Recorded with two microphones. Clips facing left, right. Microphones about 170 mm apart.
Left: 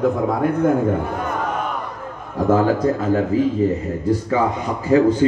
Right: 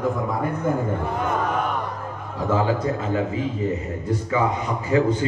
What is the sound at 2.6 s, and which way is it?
Speech, 45° left (ahead or behind).